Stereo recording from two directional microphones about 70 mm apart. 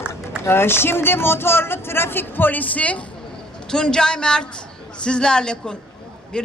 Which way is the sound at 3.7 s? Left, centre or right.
Centre.